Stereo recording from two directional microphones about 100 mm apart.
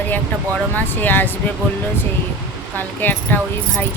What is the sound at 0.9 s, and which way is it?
Speech, 20° left (ahead or behind).